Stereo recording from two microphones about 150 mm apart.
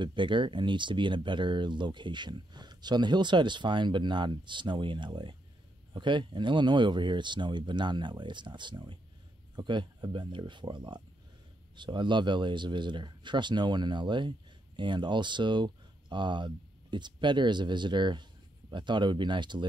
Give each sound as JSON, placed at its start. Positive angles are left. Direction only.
{"t": 0.0, "sound": "speech", "side_deg": -30}